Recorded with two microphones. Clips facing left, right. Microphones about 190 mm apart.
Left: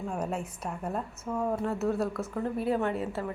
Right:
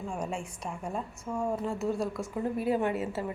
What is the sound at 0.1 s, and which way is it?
Speech, 5° left (ahead or behind).